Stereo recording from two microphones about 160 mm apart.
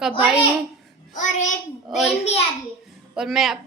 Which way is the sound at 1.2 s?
50° left (ahead or behind).